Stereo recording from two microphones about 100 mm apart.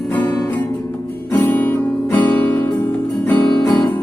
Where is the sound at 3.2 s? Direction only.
20° left (ahead or behind).